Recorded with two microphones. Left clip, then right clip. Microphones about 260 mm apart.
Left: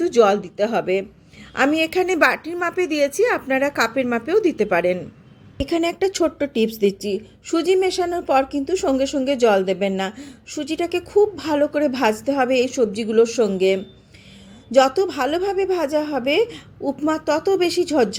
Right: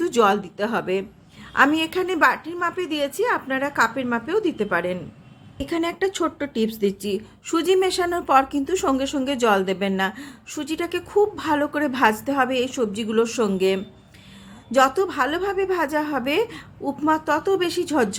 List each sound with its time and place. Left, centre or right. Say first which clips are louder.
0.0 s a woman's voice: left 3 dB; centre